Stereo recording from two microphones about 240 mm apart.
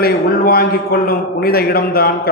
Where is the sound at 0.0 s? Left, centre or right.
Left.